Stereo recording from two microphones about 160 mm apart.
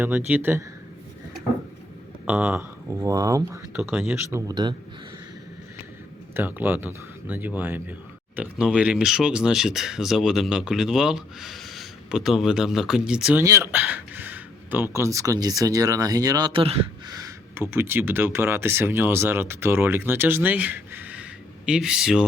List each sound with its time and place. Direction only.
0.3 s speech: 10° right (ahead or behind)
2.2 s speech: 10° right (ahead or behind)
3.7 s speech: 5° right (ahead or behind)
4.3 s speech: 15° right (ahead or behind)
6.3 s speech: 10° right (ahead or behind)
13.4 s speech: 20° right (ahead or behind)
16.5 s speech: 35° right (ahead or behind)
17.1 s speech: 20° right (ahead or behind); by 22.3 s 5° right (ahead or behind)